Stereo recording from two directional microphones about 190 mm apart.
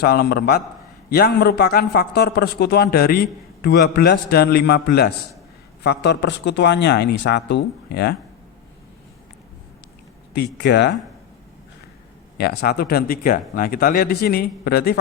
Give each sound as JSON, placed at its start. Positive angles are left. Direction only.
{"t": 0.0, "sound": "a man's voice", "side_deg": 55}
{"t": 10.3, "sound": "a man's voice", "side_deg": 65}
{"t": 12.4, "sound": "speech", "side_deg": 55}